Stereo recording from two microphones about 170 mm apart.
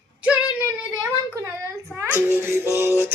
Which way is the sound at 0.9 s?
20° right (ahead or behind).